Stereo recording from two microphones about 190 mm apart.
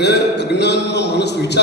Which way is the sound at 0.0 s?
60° left (ahead or behind).